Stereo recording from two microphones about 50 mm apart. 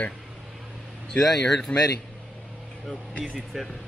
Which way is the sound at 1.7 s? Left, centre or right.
Left.